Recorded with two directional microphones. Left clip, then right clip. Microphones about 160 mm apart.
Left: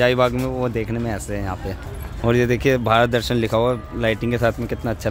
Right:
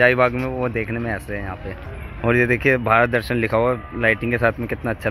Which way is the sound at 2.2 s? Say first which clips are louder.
Right 1 dB; 20° left (ahead or behind).